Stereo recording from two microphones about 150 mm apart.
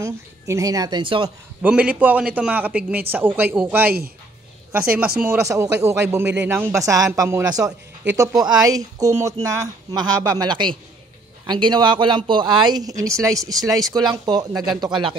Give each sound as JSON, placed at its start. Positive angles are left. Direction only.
{"t": 0.0, "sound": "speech", "side_deg": -20}
{"t": 1.6, "sound": "speech", "side_deg": -10}
{"t": 5.2, "sound": "speech", "side_deg": -15}